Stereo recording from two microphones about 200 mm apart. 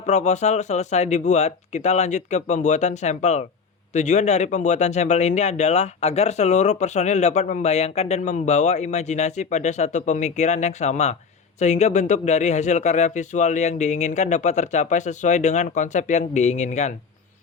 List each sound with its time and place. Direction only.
0.0 s speech: 35° left (ahead or behind)